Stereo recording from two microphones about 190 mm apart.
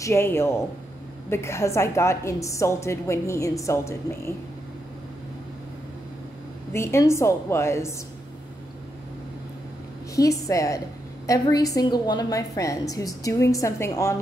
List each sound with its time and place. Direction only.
0.0 s a woman's voice: 15° left (ahead or behind)
6.7 s a woman's voice: 15° left (ahead or behind)
10.1 s a woman's voice: 15° left (ahead or behind)